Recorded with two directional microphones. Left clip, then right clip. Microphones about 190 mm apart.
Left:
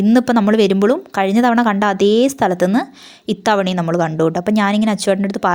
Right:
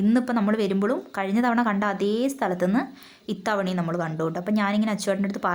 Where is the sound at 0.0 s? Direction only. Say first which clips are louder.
Left 10 dB; 35° left (ahead or behind).